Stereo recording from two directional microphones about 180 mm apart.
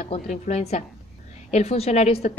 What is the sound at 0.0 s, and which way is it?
A woman's voice, 40° left (ahead or behind).